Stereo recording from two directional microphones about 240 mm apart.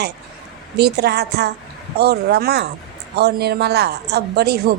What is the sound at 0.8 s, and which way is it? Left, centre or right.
Speech, right.